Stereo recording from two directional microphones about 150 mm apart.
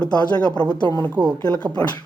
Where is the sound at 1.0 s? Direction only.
30° right (ahead or behind).